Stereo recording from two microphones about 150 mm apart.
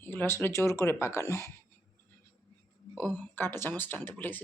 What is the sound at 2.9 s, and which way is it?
Speech, centre (ahead or behind).